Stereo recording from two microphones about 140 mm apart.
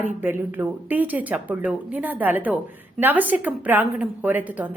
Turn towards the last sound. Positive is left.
turn(degrees=-15)  # may be behind; listen again after turning